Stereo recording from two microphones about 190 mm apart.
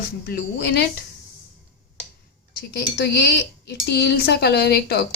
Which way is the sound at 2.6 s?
60° left (ahead or behind).